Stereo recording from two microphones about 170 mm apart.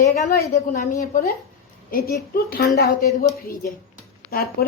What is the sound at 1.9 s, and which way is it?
A woman's voice, 60° left (ahead or behind).